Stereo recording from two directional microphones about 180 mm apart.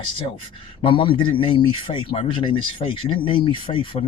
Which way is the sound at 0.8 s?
30° left (ahead or behind).